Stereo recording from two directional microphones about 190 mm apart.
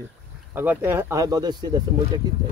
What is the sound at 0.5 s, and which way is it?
Speech, 10° right (ahead or behind).